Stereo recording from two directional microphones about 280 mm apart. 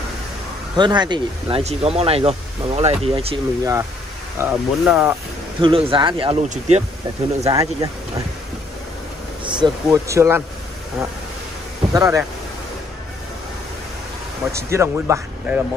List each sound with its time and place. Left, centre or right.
0.7 s speech: centre
4.4 s speech: centre
5.6 s speech: centre
9.4 s speech: centre
11.9 s speech: centre
14.5 s speech: centre